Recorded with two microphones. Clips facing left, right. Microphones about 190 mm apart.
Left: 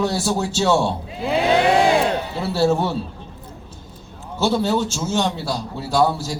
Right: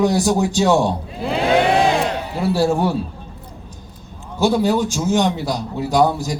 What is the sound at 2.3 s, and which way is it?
Speech, 15° right (ahead or behind).